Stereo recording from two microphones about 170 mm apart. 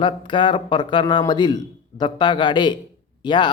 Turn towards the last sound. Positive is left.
turn(degrees=25)  # may be behind; listen again after turning